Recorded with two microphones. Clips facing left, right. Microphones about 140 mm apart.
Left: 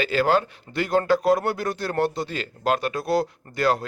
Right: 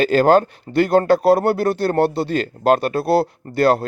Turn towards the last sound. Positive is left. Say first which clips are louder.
# right 7 dB
turn(degrees=-35)  # may be behind; listen again after turning